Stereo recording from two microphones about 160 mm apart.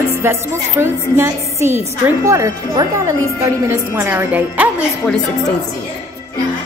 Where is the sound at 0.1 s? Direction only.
15° right (ahead or behind).